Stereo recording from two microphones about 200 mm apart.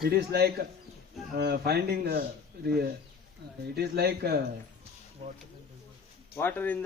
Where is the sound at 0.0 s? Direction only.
50° right (ahead or behind).